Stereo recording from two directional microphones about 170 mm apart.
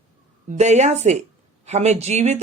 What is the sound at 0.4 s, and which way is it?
Speech, 40° right (ahead or behind).